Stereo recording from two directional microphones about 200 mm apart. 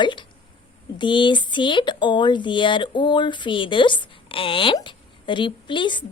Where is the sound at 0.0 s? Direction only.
25° left (ahead or behind).